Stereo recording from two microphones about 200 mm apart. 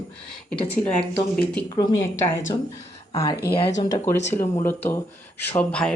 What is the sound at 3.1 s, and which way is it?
Speech, 15° left (ahead or behind).